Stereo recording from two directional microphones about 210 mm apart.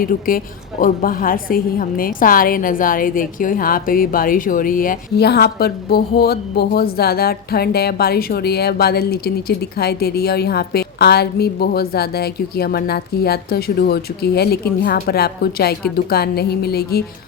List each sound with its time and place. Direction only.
0.0 s a woman's voice: 45° left (ahead or behind)